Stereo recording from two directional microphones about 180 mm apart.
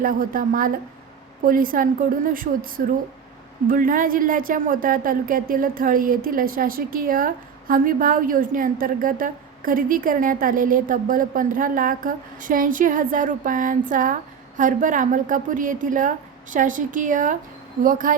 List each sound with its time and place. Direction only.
0.0 s speech: 50° right (ahead or behind)